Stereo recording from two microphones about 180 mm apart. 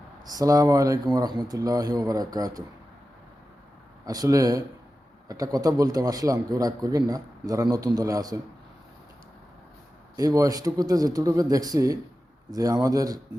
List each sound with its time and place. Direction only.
0.3 s speech: 20° right (ahead or behind)
4.0 s speech: 20° right (ahead or behind)
10.2 s speech: 20° right (ahead or behind)